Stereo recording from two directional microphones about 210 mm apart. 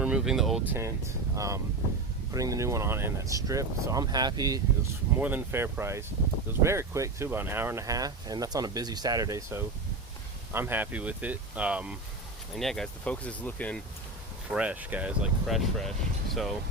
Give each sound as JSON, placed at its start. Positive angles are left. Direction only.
{"t": 0.0, "sound": "speech", "side_deg": -5}
{"t": 0.8, "sound": "speech", "side_deg": -15}
{"t": 14.5, "sound": "speech", "side_deg": -5}